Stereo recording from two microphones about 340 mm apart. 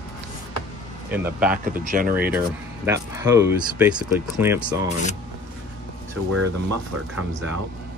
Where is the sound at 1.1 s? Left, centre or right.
Centre.